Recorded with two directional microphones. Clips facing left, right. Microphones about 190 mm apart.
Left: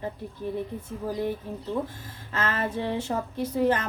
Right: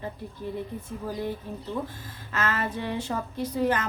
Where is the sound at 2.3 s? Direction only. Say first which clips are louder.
Left 1 dB; 30° left (ahead or behind).